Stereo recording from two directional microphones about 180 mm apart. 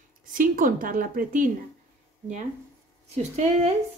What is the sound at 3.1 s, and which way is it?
Speech, 35° right (ahead or behind).